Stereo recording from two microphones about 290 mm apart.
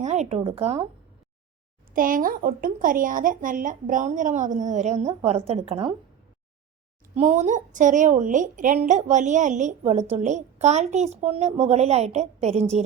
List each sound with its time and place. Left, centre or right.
0.0 s a woman's voice: right
1.9 s a woman's voice: right
7.2 s a woman's voice: right